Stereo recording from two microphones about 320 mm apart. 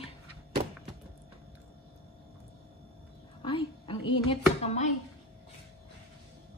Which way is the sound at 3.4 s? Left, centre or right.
Centre.